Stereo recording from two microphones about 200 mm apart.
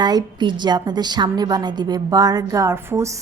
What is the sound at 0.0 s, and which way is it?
A woman's voice, 20° right (ahead or behind).